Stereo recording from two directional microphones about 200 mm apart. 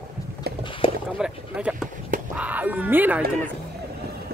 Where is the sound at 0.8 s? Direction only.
25° left (ahead or behind).